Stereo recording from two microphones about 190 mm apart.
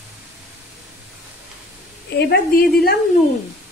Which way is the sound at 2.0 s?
55° left (ahead or behind).